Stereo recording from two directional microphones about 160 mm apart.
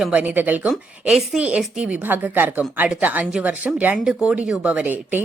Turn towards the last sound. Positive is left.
turn(degrees=-10)  # may be behind; listen again after turning